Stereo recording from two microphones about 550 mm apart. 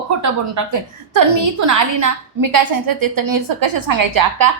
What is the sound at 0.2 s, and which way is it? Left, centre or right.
A woman's voice, right.